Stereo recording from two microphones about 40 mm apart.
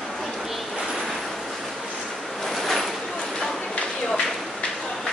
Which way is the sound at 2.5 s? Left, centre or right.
Centre.